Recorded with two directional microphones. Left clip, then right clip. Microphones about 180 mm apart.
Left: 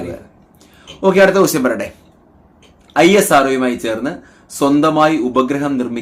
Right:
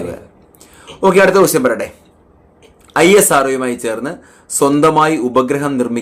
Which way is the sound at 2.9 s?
35° right (ahead or behind).